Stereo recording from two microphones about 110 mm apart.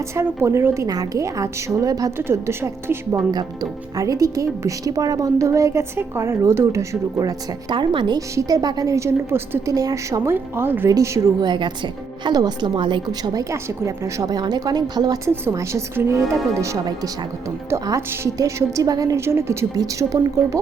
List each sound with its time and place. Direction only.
0.1 s a woman's voice: 25° right (ahead or behind)
2.1 s a woman's voice: 20° right (ahead or behind)
3.3 s speech: 35° right (ahead or behind)
8.4 s a woman's voice: 35° right (ahead or behind)
11.3 s speech: 45° right (ahead or behind)
15.3 s a woman's voice: 25° right (ahead or behind)